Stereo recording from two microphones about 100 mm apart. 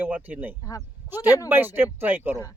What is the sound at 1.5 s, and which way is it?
Speech, 20° right (ahead or behind).